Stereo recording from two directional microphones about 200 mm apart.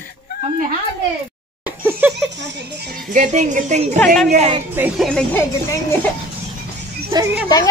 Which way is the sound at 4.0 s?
5° left (ahead or behind).